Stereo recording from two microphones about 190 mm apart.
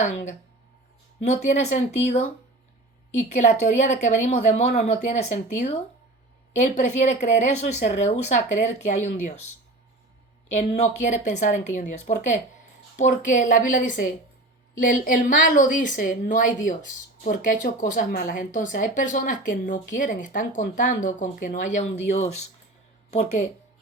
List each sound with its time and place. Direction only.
0.0 s a woman's voice: 40° left (ahead or behind)
10.5 s a woman's voice: 35° left (ahead or behind)